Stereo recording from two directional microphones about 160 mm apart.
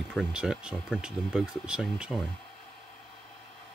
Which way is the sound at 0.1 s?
5° right (ahead or behind).